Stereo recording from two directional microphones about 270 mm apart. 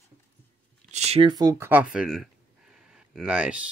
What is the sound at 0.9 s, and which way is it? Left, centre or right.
Speech, right.